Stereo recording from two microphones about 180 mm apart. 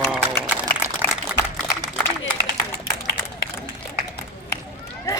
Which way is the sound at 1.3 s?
10° right (ahead or behind).